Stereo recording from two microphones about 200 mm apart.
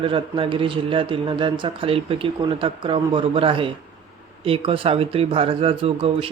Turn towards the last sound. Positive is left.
turn(degrees=-30)  # may be behind; listen again after turning